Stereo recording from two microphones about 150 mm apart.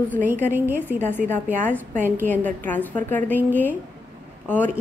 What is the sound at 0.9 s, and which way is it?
Speech, 15° left (ahead or behind).